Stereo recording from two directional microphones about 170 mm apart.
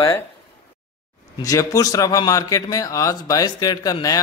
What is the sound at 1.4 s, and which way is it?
A man's voice, 20° left (ahead or behind).